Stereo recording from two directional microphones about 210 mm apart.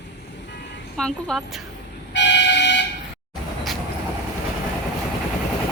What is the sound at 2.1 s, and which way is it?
Vehicle, 55° left (ahead or behind).